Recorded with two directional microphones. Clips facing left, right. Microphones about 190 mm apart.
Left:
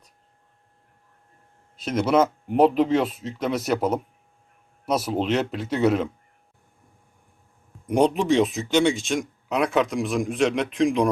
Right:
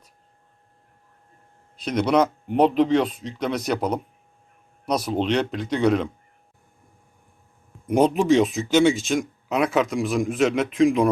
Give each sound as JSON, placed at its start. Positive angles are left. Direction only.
{"t": 1.7, "sound": "speech", "side_deg": 0}
{"t": 7.9, "sound": "speech", "side_deg": 0}